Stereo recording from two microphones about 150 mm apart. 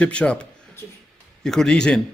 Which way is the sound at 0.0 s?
10° left (ahead or behind).